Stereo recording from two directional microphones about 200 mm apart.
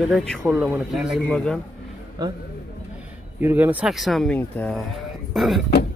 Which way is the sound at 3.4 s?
10° right (ahead or behind).